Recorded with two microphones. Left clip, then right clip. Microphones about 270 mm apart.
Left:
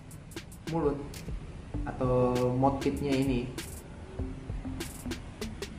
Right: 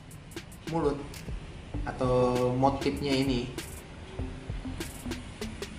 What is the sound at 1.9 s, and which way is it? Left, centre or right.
Mantra, centre.